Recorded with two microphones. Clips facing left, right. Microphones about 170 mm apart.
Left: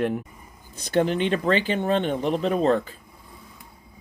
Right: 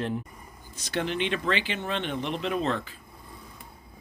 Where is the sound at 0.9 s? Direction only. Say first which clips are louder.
Left 7 dB; 40° left (ahead or behind).